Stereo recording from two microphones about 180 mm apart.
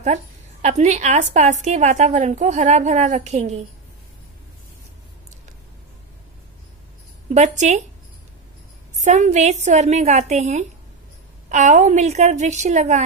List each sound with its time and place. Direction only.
0.0 s a woman's voice: 40° right (ahead or behind)
7.3 s a woman's voice: 40° right (ahead or behind)
9.0 s a woman's voice: 40° right (ahead or behind)